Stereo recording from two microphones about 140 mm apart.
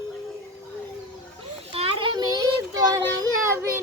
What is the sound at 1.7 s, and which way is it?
Children playing, 40° right (ahead or behind).